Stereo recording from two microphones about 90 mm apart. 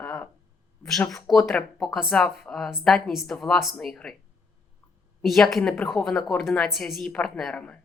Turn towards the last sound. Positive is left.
turn(degrees=10)  # may be behind; listen again after turning